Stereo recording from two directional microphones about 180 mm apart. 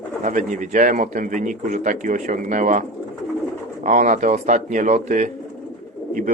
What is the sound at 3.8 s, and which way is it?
Speech, 45° right (ahead or behind).